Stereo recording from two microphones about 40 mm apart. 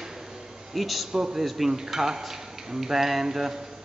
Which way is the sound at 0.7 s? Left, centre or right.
Centre.